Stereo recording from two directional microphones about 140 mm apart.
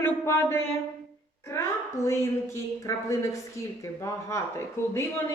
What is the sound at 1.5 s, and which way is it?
A woman's voice, 20° left (ahead or behind).